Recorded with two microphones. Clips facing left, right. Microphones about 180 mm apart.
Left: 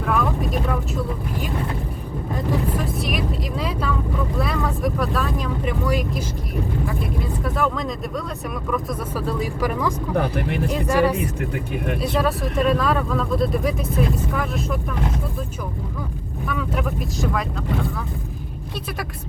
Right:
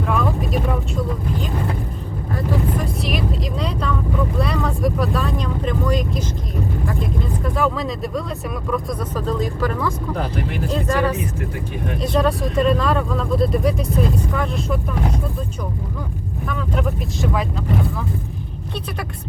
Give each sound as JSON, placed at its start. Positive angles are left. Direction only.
{"t": 0.0, "sound": "vehicle", "side_deg": 0}
{"t": 3.0, "sound": "vehicle", "side_deg": 0}
{"t": 4.4, "sound": "speech", "side_deg": 0}
{"t": 10.2, "sound": "speech", "side_deg": 60}
{"t": 10.7, "sound": "speech", "side_deg": 10}
{"t": 16.5, "sound": "speech", "side_deg": 5}